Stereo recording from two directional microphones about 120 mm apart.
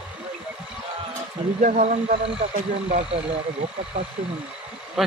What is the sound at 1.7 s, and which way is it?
Speech, 80° right.